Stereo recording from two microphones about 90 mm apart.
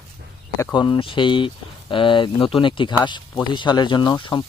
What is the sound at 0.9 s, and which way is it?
Speech, 65° left (ahead or behind).